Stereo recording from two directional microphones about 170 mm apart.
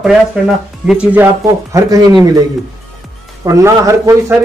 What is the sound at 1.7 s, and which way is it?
Speech, 20° right (ahead or behind).